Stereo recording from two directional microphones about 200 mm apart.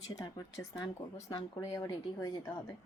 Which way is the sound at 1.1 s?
25° left (ahead or behind).